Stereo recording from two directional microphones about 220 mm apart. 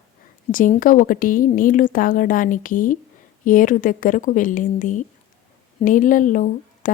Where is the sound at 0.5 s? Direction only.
35° left (ahead or behind).